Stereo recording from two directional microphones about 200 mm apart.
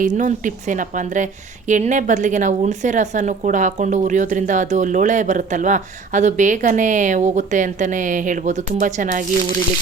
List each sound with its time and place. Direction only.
0.0 s a woman's voice: 40° right (ahead or behind)